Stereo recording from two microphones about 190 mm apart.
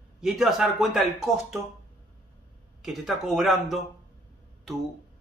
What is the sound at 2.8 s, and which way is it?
Speech, centre (ahead or behind).